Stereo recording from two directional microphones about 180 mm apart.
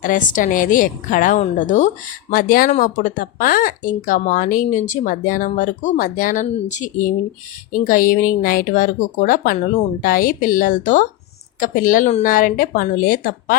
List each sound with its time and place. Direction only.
0.0 s speech: 45° left (ahead or behind)